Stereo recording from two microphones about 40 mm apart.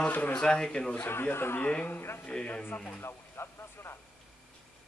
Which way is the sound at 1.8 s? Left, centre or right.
Left.